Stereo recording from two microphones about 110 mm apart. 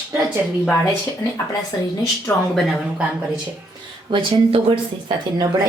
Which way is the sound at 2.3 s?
25° left (ahead or behind).